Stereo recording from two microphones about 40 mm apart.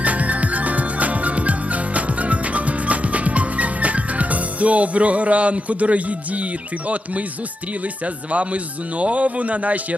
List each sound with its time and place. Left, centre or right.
0.0 s music: right
6.8 s speech: right